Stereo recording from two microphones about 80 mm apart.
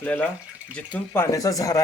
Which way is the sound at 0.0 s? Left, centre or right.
Centre.